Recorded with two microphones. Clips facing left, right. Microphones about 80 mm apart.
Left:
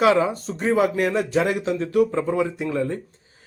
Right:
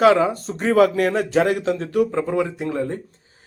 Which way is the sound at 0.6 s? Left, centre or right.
Right.